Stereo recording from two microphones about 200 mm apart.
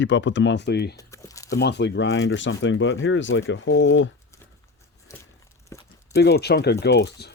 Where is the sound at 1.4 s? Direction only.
55° left (ahead or behind); by 4.1 s 75° left (ahead or behind).